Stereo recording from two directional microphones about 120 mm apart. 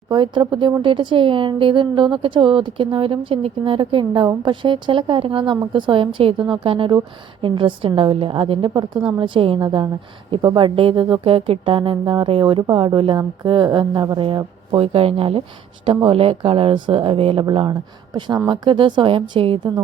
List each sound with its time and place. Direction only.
0.1 s speech: 40° right (ahead or behind)
9.6 s speech: 35° right (ahead or behind)